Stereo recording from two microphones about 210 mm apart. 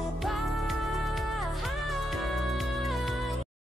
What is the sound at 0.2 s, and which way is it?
Music, centre (ahead or behind).